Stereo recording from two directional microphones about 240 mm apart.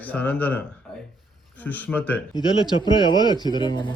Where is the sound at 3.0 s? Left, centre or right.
Centre.